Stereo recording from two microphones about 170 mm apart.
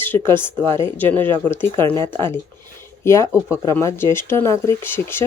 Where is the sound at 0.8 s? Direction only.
15° left (ahead or behind).